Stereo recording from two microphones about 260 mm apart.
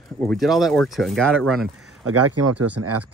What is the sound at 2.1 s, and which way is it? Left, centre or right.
Speech, right.